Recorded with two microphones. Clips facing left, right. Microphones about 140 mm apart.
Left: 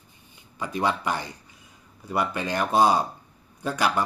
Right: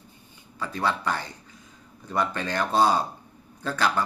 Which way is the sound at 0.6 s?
15° left (ahead or behind).